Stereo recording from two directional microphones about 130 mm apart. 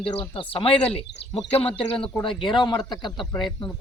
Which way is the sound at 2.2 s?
40° left (ahead or behind).